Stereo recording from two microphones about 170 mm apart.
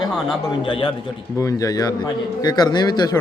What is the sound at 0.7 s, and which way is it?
Speech, 30° left (ahead or behind).